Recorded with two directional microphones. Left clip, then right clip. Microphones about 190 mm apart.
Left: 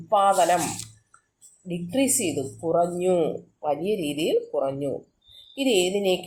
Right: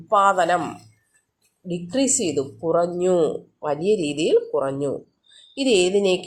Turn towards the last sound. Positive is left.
turn(degrees=-35)  # may be behind; listen again after turning